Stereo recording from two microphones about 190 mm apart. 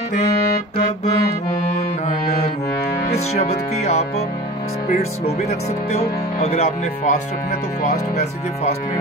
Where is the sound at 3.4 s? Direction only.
35° left (ahead or behind).